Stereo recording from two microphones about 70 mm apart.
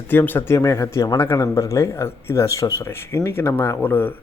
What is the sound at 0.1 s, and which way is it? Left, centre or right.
Speech, left.